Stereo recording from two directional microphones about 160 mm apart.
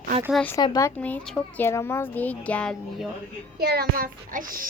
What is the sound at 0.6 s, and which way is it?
Speech, 20° left (ahead or behind).